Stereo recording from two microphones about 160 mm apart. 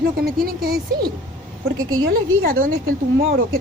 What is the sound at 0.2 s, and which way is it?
Speech, 70° right (ahead or behind).